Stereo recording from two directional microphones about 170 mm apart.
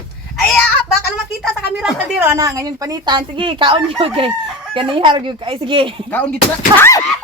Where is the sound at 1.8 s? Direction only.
5° right (ahead or behind).